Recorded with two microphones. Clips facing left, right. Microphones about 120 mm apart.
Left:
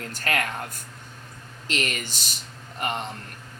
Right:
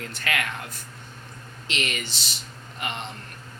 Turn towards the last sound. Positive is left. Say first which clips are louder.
# left 4 dB
turn(degrees=45)  # may be behind; listen again after turning